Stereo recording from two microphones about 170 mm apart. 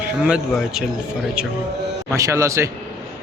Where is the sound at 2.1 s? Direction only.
20° right (ahead or behind).